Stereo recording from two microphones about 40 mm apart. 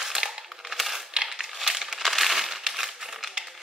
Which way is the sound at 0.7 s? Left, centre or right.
Centre.